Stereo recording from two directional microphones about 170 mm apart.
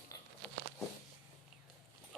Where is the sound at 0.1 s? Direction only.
20° left (ahead or behind).